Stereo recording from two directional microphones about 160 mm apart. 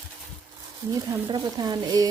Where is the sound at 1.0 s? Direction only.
25° right (ahead or behind).